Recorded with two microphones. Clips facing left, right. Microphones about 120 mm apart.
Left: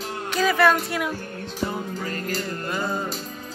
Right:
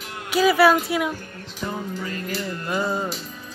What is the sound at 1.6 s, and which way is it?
Music, 40° left (ahead or behind).